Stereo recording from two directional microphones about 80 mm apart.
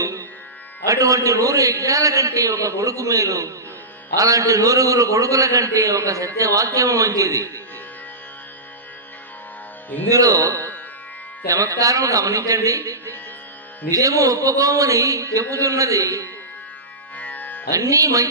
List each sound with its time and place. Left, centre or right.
0.0 s music: right
0.9 s a man's voice: right
10.1 s a man's voice: right
17.2 s music: left
17.7 s a man's voice: right